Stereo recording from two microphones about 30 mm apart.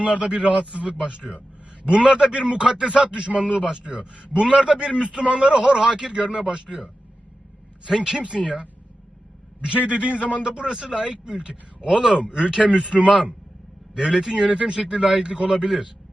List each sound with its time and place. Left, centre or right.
0.0 s a man's voice: right
1.1 s a man's voice: right
6.1 s speech: right
7.9 s a man's voice: centre
9.6 s a man's voice: right
10.4 s a man's voice: right
13.1 s speech: right
14.0 s a man's voice: centre
14.4 s speech: right